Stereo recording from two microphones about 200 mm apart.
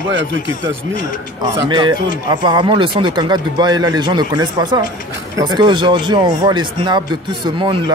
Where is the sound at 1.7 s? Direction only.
20° right (ahead or behind).